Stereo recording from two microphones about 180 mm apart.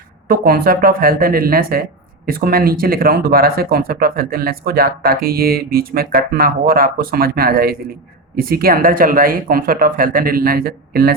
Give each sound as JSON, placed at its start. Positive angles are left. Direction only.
{"t": 0.3, "sound": "speech", "side_deg": -55}